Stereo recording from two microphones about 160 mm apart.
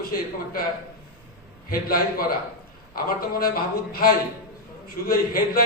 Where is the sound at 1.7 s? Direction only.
70° left (ahead or behind).